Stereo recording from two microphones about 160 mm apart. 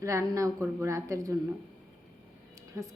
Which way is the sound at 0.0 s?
20° right (ahead or behind).